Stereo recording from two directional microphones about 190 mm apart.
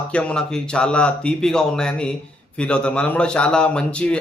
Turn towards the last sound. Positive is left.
turn(degrees=5)  # may be behind; listen again after turning